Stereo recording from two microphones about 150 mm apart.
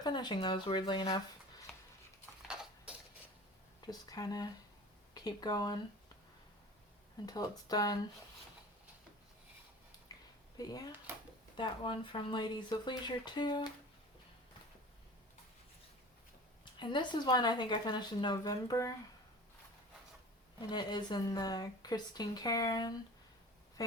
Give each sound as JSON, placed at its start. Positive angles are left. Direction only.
{"t": 0.0, "sound": "speech", "side_deg": 30}
{"t": 2.5, "sound": "a sound", "side_deg": -5}
{"t": 3.8, "sound": "speech", "side_deg": 25}
{"t": 7.3, "sound": "speech", "side_deg": 25}
{"t": 10.1, "sound": "a sound", "side_deg": 25}
{"t": 10.6, "sound": "speech", "side_deg": 25}
{"t": 16.8, "sound": "speech", "side_deg": 30}
{"t": 20.6, "sound": "speech", "side_deg": 30}